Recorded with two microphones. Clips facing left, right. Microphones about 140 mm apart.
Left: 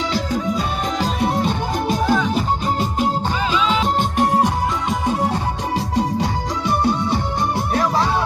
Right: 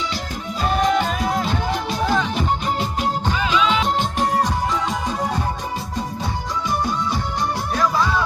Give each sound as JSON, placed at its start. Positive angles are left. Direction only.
{"t": 1.7, "sound": "music", "side_deg": 45}
{"t": 2.1, "sound": "music", "side_deg": 10}
{"t": 3.7, "sound": "music", "side_deg": 40}
{"t": 4.4, "sound": "music", "side_deg": 55}
{"t": 6.7, "sound": "music", "side_deg": 60}